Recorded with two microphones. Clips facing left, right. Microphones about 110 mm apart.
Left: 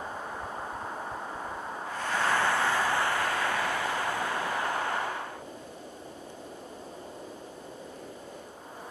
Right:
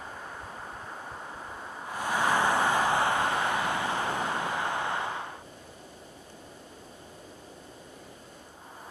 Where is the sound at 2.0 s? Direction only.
15° right (ahead or behind).